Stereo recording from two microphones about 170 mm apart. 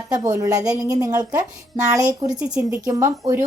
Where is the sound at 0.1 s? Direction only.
20° right (ahead or behind).